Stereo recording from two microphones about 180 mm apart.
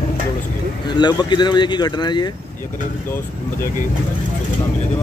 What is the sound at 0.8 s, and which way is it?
Speech, 25° left (ahead or behind).